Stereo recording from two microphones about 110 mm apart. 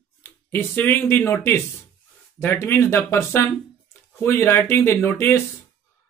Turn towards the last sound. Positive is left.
turn(degrees=20)  # may be behind; listen again after turning